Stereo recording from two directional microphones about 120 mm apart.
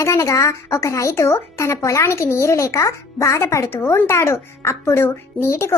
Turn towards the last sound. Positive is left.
turn(degrees=20)  # may be behind; listen again after turning